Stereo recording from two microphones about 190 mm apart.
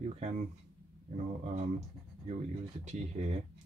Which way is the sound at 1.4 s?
35° right (ahead or behind).